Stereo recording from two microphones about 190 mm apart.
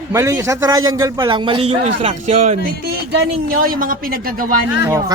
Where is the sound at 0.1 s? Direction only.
15° right (ahead or behind); by 2.6 s 40° right (ahead or behind).